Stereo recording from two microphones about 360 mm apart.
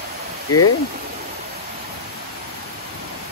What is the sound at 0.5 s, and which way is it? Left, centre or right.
Speech, left.